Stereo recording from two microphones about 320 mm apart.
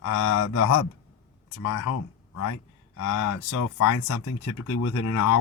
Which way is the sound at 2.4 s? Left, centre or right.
Left.